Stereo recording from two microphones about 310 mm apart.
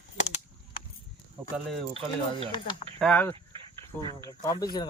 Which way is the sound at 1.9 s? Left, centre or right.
Centre.